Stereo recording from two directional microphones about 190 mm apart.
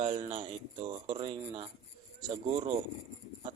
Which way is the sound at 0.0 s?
30° right (ahead or behind).